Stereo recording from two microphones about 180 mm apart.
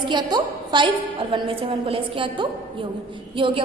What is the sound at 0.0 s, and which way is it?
A woman's voice, 25° right (ahead or behind).